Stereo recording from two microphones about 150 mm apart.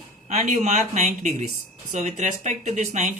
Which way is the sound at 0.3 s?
45° right (ahead or behind).